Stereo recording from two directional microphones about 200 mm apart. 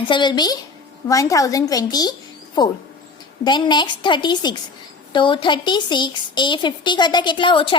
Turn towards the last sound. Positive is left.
turn(degrees=25)  # may be behind; listen again after turning